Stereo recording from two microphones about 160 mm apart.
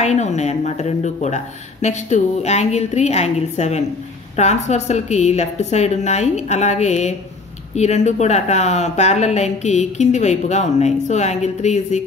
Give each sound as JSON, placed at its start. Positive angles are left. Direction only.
{"t": 0.0, "sound": "speech", "side_deg": 45}